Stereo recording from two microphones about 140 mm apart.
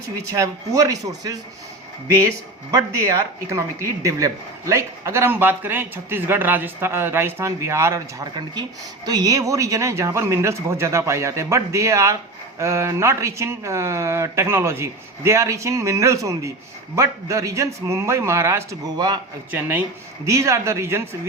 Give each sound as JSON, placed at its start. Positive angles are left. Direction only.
{"t": 0.2, "sound": "speech", "side_deg": -25}
{"t": 2.7, "sound": "speech", "side_deg": -20}
{"t": 19.5, "sound": "speech", "side_deg": -15}